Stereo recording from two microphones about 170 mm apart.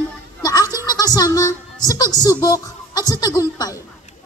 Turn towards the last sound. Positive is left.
turn(degrees=20)  # may be behind; listen again after turning